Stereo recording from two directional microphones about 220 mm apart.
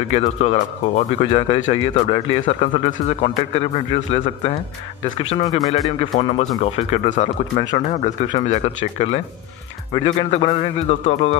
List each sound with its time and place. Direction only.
0.1 s speech: 30° left (ahead or behind)